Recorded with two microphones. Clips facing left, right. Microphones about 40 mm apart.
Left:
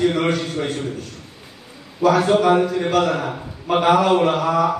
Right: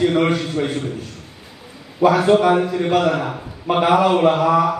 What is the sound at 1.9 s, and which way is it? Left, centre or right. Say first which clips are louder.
A man's voice: right 2 dB; centre.